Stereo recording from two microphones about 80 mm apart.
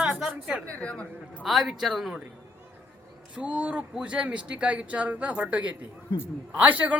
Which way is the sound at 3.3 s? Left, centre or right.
Centre.